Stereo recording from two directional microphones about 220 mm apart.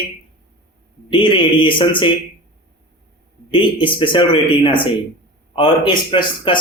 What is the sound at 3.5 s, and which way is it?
Speech, 20° left (ahead or behind).